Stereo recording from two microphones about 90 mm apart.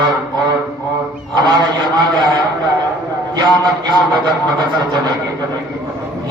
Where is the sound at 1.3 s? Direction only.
55° right (ahead or behind).